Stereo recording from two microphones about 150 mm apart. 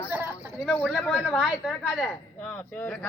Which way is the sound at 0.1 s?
15° right (ahead or behind).